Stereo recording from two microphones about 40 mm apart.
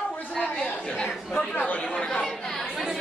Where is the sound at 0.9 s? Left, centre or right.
Centre.